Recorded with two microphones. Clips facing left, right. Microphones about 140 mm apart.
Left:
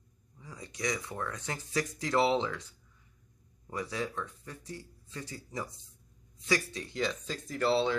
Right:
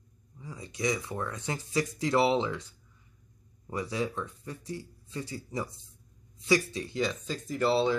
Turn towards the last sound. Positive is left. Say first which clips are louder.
# right 2 dB
turn(degrees=-10)  # may be behind; listen again after turning